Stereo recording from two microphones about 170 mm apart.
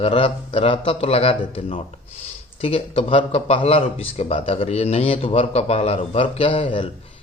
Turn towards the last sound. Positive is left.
turn(degrees=30)  # may be behind; listen again after turning